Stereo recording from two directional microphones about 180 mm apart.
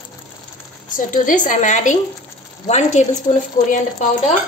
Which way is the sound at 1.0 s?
45° left (ahead or behind).